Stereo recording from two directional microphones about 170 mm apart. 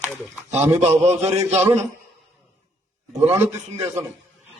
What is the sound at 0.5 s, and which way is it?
A man's voice, 40° right (ahead or behind).